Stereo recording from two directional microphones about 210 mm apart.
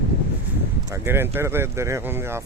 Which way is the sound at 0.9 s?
10° right (ahead or behind).